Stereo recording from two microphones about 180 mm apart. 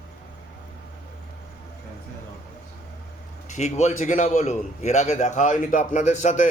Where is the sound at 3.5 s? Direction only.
40° left (ahead or behind).